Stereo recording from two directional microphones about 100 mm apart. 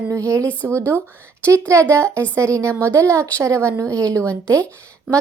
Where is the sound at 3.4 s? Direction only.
30° right (ahead or behind).